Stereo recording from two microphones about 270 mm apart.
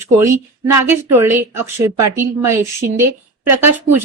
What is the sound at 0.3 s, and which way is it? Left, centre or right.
Speech, right.